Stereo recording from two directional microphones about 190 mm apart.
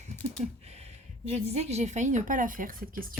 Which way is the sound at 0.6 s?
35° right (ahead or behind).